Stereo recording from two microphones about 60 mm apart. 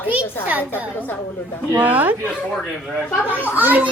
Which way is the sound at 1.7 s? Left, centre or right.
Right.